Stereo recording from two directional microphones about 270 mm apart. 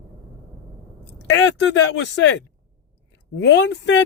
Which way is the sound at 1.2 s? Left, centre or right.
Left.